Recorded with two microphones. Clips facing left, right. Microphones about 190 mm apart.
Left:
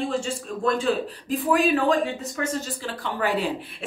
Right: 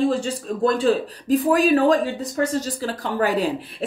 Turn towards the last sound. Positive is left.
turn(degrees=-40)  # may be behind; listen again after turning